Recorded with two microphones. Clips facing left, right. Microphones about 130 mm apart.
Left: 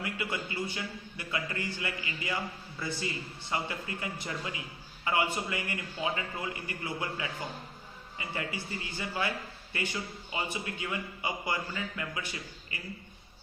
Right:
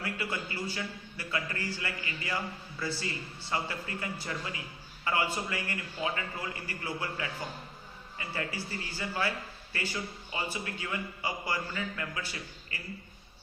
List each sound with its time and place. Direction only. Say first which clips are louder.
0.0 s a man's voice: even; 20° left (ahead or behind)